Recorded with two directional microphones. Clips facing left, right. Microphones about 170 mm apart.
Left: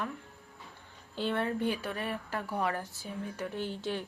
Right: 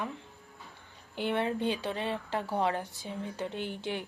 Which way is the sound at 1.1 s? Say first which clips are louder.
Right 1 dB; 15° right (ahead or behind).